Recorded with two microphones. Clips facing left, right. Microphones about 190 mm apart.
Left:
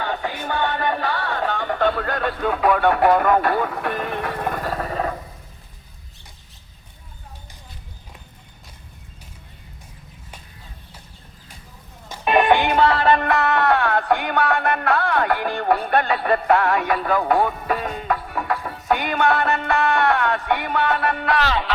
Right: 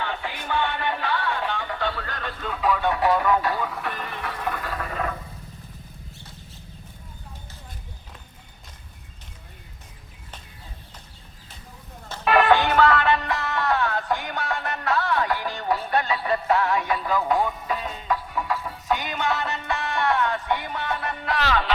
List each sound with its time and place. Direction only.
0.0 s music: 40° left (ahead or behind)
12.0 s music: 15° left (ahead or behind)
12.8 s music: 30° left (ahead or behind)
13.1 s music: 55° left (ahead or behind)